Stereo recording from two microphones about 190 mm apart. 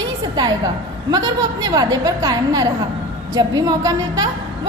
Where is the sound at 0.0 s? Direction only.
20° right (ahead or behind).